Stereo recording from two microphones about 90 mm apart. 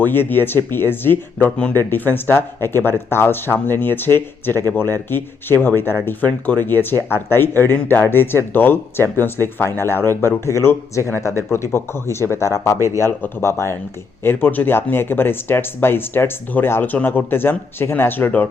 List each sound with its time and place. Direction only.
0.0 s speech: 20° left (ahead or behind)
1.5 s speech: 10° left (ahead or behind)
1.7 s speech: 20° left (ahead or behind)